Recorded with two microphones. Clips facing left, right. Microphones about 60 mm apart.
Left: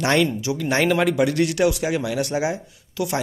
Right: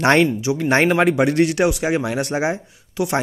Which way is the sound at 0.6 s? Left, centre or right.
Right.